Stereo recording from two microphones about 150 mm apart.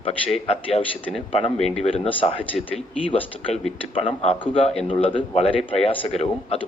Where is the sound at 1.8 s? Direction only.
35° left (ahead or behind).